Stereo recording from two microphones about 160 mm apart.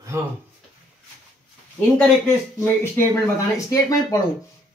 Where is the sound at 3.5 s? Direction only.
20° left (ahead or behind).